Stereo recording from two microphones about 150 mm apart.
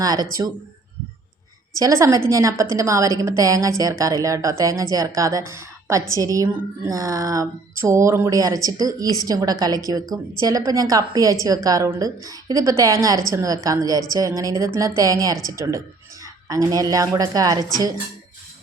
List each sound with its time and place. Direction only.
0.0 s a woman's voice: 25° right (ahead or behind)
1.7 s a woman's voice: 20° right (ahead or behind)